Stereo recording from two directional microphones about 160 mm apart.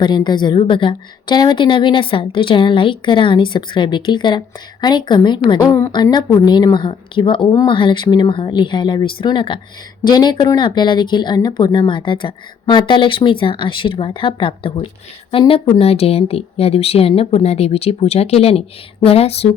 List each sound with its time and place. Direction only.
0.0 s a woman's voice: 30° left (ahead or behind)